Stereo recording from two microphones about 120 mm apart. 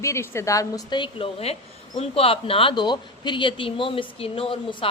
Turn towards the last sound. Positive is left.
turn(degrees=50)  # may be behind; listen again after turning